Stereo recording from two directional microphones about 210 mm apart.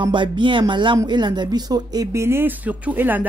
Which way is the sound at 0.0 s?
20° right (ahead or behind).